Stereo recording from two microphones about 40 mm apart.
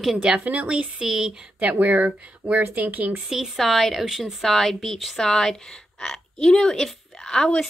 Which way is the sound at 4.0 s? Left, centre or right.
Centre.